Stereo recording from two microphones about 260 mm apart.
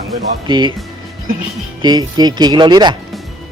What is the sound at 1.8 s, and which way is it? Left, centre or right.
Speech, centre.